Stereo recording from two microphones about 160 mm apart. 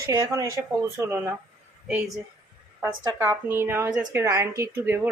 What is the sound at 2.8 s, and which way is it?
A woman's voice, 15° right (ahead or behind).